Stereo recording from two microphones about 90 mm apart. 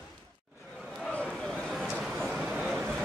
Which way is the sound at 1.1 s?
15° left (ahead or behind).